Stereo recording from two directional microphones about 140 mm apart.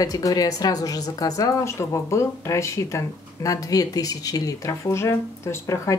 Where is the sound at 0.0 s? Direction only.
25° left (ahead or behind).